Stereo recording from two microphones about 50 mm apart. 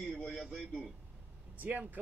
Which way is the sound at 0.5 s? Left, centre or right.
Centre.